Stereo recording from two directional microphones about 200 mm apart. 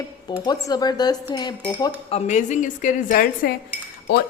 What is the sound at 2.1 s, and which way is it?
A woman's voice, 35° left (ahead or behind).